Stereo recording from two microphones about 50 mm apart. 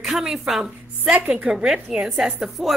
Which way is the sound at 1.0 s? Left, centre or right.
Right.